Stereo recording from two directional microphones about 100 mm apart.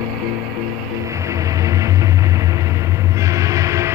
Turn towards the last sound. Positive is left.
turn(degrees=-30)  # may be behind; listen again after turning